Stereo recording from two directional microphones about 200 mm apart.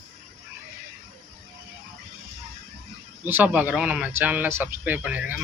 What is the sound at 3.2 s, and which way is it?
Speech, 10° right (ahead or behind).